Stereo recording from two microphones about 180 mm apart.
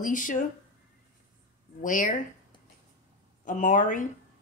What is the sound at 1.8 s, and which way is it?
Speech, 45° left (ahead or behind).